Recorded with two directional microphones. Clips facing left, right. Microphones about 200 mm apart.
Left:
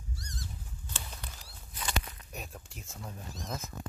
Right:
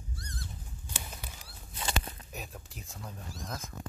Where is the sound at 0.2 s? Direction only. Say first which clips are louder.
Right 1 dB; 55° right (ahead or behind).